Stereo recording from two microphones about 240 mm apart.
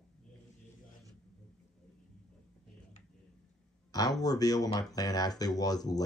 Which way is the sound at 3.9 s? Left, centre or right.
Centre.